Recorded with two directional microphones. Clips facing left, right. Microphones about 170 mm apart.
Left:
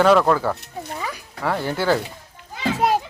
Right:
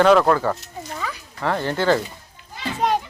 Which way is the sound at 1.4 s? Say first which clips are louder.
Right 1 dB; 10° left (ahead or behind).